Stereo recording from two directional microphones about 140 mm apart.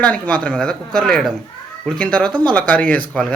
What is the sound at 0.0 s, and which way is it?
Speech, 10° left (ahead or behind).